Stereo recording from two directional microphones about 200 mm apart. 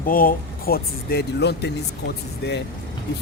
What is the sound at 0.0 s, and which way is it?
Speech, 45° left (ahead or behind).